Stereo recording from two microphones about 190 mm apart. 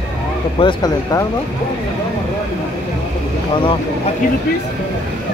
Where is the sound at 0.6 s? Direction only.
20° left (ahead or behind).